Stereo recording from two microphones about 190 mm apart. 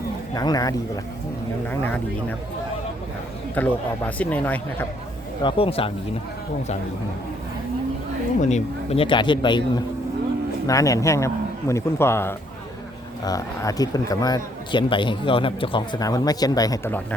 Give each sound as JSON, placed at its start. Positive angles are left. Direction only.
{"t": 0.3, "sound": "a man's voice", "side_deg": 20}
{"t": 1.6, "sound": "a man's voice", "side_deg": 10}
{"t": 3.5, "sound": "a man's voice", "side_deg": 10}
{"t": 5.4, "sound": "a man's voice", "side_deg": 25}
{"t": 8.4, "sound": "a man's voice", "side_deg": 35}